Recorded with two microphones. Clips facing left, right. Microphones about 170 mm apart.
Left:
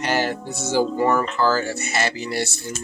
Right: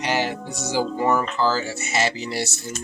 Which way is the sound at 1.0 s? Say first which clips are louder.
Left 1 dB; 15° right (ahead or behind).